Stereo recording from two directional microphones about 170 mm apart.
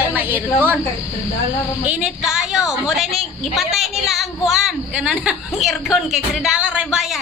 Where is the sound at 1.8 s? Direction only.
5° right (ahead or behind).